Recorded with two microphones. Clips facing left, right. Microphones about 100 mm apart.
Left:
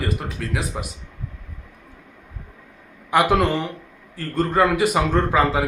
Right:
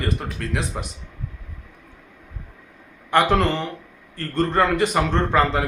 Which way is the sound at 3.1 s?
10° left (ahead or behind).